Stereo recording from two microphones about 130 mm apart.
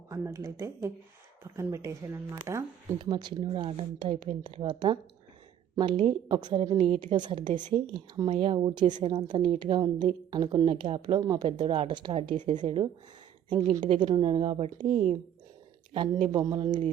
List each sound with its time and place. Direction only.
0.1 s speech: 25° right (ahead or behind)
3.0 s speech: 35° right (ahead or behind)
4.4 s speech: 35° right (ahead or behind)
11.2 s speech: 30° right (ahead or behind)
11.4 s speech: 40° right (ahead or behind)
16.3 s speech: 35° right (ahead or behind)